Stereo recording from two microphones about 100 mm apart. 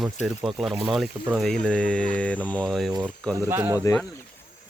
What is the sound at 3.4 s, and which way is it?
Speech, 30° right (ahead or behind).